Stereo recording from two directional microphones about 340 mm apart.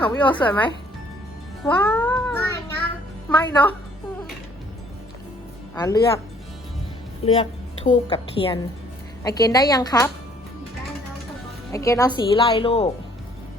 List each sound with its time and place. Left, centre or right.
0.0 s a woman's voice: centre
1.6 s a sound: centre
3.2 s speech: centre
5.7 s speech: centre
7.9 s a woman's voice: centre
11.7 s a woman's voice: centre